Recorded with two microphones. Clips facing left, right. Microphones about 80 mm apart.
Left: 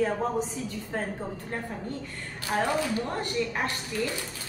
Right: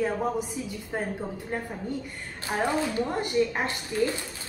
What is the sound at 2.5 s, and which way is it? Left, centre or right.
A woman's voice, centre.